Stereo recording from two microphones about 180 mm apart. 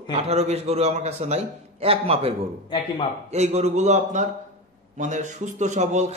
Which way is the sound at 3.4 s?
40° right (ahead or behind).